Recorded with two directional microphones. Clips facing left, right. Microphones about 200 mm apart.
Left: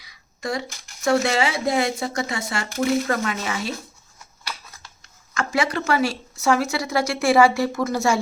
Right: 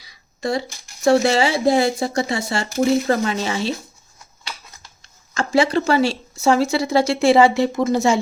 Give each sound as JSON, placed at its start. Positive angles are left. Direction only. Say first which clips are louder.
{"t": 0.0, "sound": "a sound", "louder": "right 5 dB", "side_deg": -30}
{"t": 1.0, "sound": "speech", "louder": "right 5 dB", "side_deg": -30}
{"t": 5.0, "sound": "speech", "louder": "right 3 dB", "side_deg": -30}